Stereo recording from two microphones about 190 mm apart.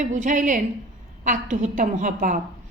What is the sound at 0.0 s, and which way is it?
Speech, 40° right (ahead or behind).